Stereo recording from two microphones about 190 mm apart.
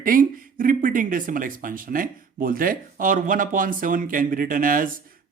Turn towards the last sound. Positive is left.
turn(degrees=-45)  # may be behind; listen again after turning